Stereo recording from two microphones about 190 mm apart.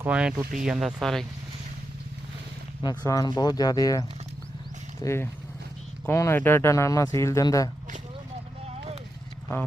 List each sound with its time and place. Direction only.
0.0 s speech: 5° right (ahead or behind)
2.8 s speech: 20° left (ahead or behind)